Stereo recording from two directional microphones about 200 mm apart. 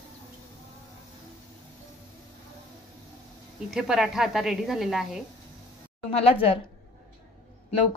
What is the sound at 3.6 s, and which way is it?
Speech, centre (ahead or behind).